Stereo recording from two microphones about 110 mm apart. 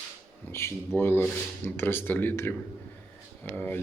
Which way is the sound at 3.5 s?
20° left (ahead or behind).